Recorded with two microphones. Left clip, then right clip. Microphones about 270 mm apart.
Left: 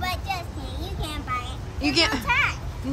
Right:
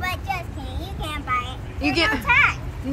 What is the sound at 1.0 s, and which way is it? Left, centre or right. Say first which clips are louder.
Children playing: right 5 dB; centre.